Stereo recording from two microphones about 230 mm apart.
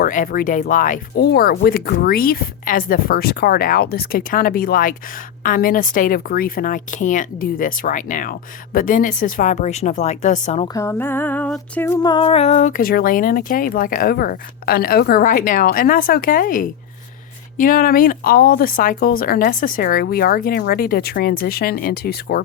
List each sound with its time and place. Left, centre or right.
0.0 s female singing: left
10.8 s female singing: centre; by 22.4 s left